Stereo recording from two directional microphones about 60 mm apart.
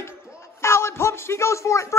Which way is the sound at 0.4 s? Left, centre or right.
Left.